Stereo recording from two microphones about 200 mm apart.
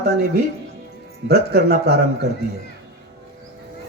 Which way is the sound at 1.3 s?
55° right (ahead or behind).